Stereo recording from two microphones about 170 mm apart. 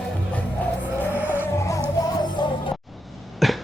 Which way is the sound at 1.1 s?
10° right (ahead or behind).